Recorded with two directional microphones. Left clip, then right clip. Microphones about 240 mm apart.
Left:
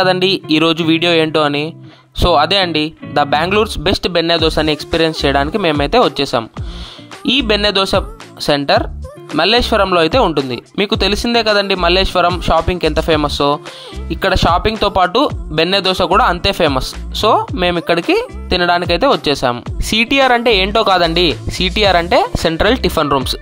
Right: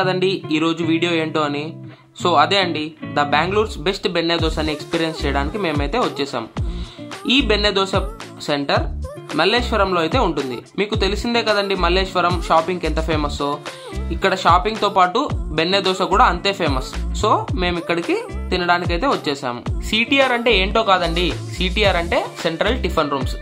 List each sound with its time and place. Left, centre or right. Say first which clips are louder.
0.0 s speech: left 6 dB; left